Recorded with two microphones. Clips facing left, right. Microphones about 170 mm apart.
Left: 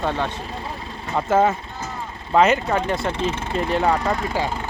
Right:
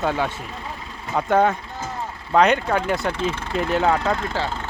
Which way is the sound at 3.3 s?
20° left (ahead or behind).